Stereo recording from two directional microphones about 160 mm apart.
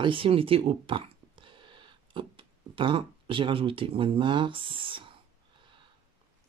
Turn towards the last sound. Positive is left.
turn(degrees=-30)  # may be behind; listen again after turning